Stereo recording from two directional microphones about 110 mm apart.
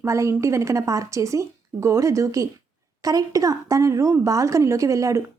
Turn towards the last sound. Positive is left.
turn(degrees=-30)  # may be behind; listen again after turning